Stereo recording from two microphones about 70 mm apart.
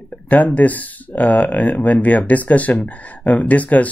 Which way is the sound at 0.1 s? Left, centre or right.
Left.